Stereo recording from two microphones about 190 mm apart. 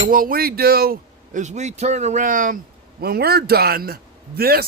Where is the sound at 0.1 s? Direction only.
50° right (ahead or behind).